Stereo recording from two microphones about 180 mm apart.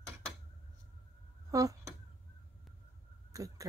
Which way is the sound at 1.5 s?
20° right (ahead or behind).